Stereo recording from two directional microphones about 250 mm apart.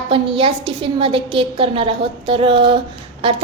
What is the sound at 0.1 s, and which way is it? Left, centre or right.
A woman's voice, right.